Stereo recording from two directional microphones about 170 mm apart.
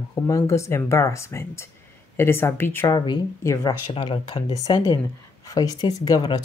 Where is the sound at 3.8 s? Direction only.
30° left (ahead or behind).